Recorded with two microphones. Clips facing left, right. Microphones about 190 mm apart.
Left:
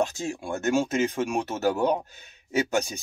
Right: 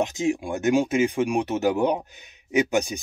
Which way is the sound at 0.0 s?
15° right (ahead or behind).